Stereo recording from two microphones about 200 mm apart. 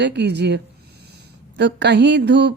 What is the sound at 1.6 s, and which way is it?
Speech, 60° right (ahead or behind).